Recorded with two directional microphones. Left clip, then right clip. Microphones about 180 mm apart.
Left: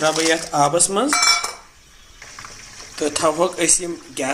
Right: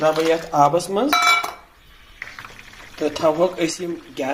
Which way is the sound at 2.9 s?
5° right (ahead or behind).